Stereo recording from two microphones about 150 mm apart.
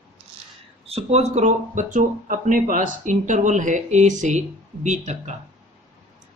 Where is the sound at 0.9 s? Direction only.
45° right (ahead or behind).